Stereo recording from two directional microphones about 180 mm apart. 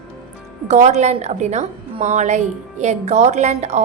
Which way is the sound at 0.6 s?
40° right (ahead or behind).